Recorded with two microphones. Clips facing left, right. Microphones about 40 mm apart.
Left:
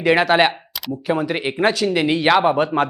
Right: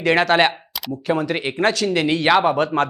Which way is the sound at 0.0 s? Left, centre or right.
Centre.